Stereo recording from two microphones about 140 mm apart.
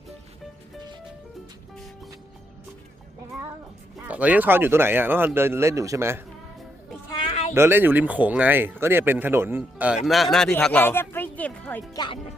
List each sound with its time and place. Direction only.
4.0 s speech: 10° right (ahead or behind)
7.1 s a sound: 35° left (ahead or behind)
7.5 s speech: 15° right (ahead or behind)
10.1 s speech: centre (ahead or behind)
11.9 s speech: 35° left (ahead or behind)